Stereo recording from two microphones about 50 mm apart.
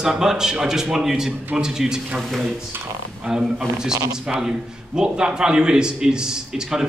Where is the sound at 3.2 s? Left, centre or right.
Centre.